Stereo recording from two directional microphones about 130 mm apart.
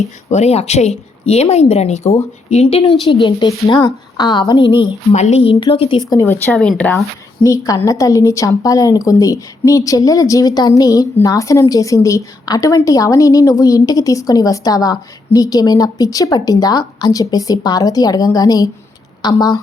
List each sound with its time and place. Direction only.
0.3 s a woman's voice: 60° left (ahead or behind); by 4.9 s 40° left (ahead or behind)
5.1 s speech: 65° left (ahead or behind)
5.4 s speech: 45° left (ahead or behind)
6.1 s a woman's voice: 20° left (ahead or behind)
6.5 s speech: 5° left (ahead or behind)
7.4 s a woman's voice: 25° left (ahead or behind)